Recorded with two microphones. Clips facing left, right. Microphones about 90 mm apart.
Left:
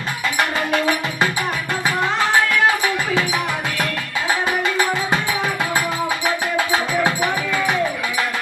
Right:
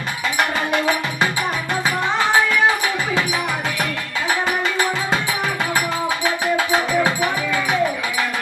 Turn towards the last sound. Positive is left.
turn(degrees=20)  # may be behind; listen again after turning